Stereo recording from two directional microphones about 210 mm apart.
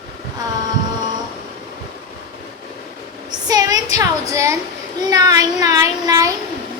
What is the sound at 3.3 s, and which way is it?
A woman's voice, 20° right (ahead or behind).